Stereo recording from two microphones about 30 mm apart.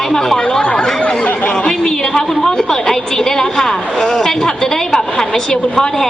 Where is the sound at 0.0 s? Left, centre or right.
Centre.